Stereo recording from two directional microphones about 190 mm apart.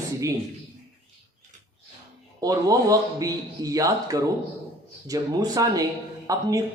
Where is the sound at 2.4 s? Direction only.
15° right (ahead or behind).